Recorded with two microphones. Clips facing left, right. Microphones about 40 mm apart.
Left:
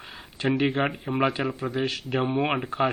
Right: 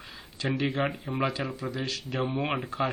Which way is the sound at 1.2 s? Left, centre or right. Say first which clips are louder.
Left 5 dB; left.